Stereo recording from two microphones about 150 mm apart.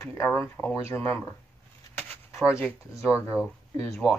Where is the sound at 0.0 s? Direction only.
20° left (ahead or behind).